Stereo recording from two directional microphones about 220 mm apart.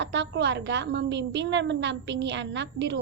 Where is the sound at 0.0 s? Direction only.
55° right (ahead or behind).